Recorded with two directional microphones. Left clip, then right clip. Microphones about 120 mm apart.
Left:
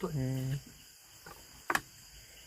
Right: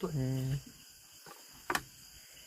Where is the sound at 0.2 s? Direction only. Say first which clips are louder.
Even; 10° right (ahead or behind).